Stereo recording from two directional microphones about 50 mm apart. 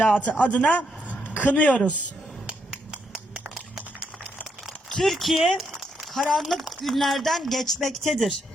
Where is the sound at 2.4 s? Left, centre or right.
Centre.